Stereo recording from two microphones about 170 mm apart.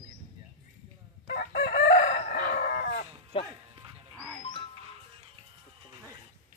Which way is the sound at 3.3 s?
30° left (ahead or behind).